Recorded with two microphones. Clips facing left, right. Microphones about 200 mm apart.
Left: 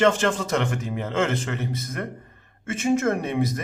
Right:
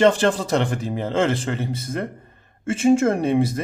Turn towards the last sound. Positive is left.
turn(degrees=-30)  # may be behind; listen again after turning